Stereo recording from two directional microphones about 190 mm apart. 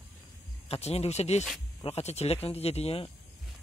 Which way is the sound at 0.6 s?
30° left (ahead or behind).